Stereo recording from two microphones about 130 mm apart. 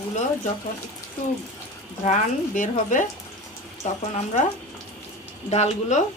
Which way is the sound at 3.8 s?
65° left (ahead or behind).